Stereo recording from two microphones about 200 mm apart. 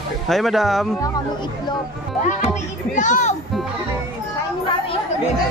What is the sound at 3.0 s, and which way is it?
Speech, 40° left (ahead or behind).